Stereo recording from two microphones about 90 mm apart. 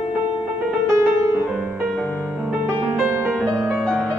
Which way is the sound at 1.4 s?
10° right (ahead or behind).